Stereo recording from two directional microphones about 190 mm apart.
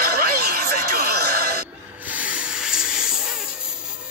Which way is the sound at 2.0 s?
5° right (ahead or behind).